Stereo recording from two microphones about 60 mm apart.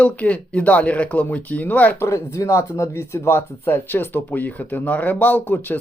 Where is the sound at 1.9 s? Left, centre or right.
Left.